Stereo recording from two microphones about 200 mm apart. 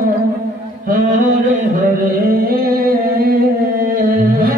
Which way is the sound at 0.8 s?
40° right (ahead or behind).